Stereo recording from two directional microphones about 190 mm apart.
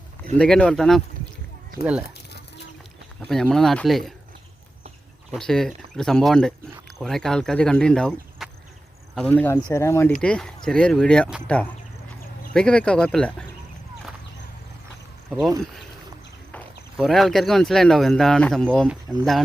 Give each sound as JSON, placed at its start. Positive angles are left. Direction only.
{"t": 0.3, "sound": "speech", "side_deg": 5}
{"t": 3.2, "sound": "speech", "side_deg": 5}
{"t": 5.3, "sound": "speech", "side_deg": 0}
{"t": 10.2, "sound": "speech", "side_deg": 5}
{"t": 12.5, "sound": "speech", "side_deg": 5}
{"t": 17.0, "sound": "speech", "side_deg": 0}